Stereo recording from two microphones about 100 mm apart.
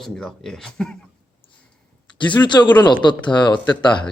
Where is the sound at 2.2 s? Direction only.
50° left (ahead or behind).